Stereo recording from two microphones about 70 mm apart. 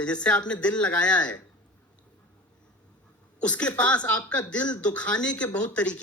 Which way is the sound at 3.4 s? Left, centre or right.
Centre.